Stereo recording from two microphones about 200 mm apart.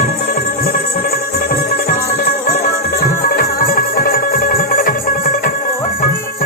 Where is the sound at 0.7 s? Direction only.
50° left (ahead or behind).